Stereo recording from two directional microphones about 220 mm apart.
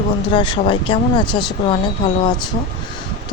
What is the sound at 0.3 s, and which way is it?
Speech, 20° left (ahead or behind).